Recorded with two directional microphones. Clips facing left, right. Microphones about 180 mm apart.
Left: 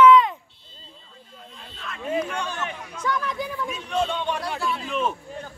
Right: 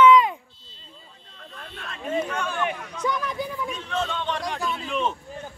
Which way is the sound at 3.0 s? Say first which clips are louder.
Even; 15° right (ahead or behind).